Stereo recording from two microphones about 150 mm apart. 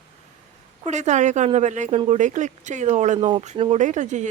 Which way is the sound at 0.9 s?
50° right (ahead or behind).